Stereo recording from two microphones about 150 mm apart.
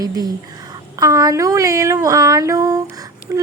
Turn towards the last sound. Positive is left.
turn(degrees=-20)  # may be behind; listen again after turning